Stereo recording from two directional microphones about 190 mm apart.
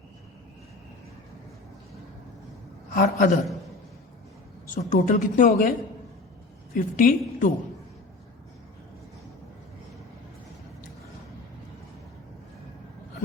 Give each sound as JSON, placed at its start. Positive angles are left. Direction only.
{"t": 2.9, "sound": "a woman's voice", "side_deg": 45}
{"t": 4.7, "sound": "a woman's voice", "side_deg": 40}
{"t": 6.7, "sound": "a woman's voice", "side_deg": 45}